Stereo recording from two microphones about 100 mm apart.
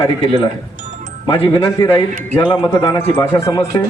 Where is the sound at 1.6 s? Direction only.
25° left (ahead or behind).